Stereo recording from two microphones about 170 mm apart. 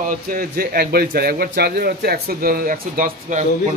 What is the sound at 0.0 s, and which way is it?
A man's voice, 55° right (ahead or behind).